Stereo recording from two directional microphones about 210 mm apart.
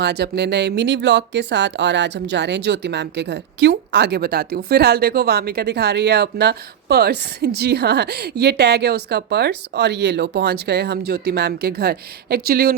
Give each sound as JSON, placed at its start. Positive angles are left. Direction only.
{"t": 0.0, "sound": "speech", "side_deg": -50}